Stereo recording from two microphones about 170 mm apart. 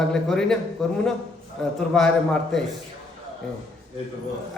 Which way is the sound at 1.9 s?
Centre (ahead or behind).